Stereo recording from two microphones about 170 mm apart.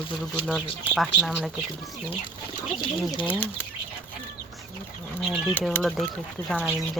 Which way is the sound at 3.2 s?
10° left (ahead or behind).